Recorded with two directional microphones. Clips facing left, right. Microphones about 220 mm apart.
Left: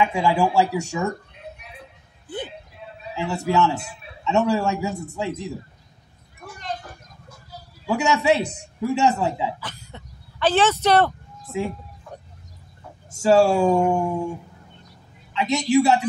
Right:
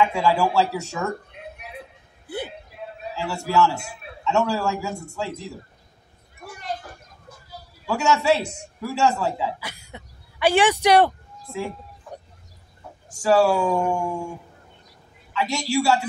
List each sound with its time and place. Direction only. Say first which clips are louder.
0.0 s speech: even; 15° left (ahead or behind)
2.2 s a sound: right 1 dB; 10° right (ahead or behind)
3.2 s speech: even; 20° left (ahead or behind)
7.8 s speech: left 1 dB; 15° left (ahead or behind)
9.6 s speech: even; 10° right (ahead or behind)
13.1 s speech: left 2 dB; 25° left (ahead or behind)
15.3 s speech: left 5 dB; 20° left (ahead or behind)